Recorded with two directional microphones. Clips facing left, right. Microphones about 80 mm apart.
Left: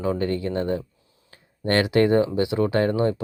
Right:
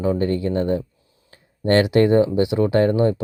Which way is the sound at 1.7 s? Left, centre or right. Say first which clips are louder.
Right 3 dB; right.